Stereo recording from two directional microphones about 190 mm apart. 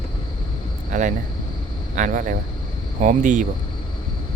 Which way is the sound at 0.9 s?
40° right (ahead or behind).